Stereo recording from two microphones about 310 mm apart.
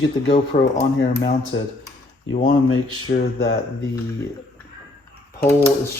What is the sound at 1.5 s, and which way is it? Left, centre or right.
Speech, left.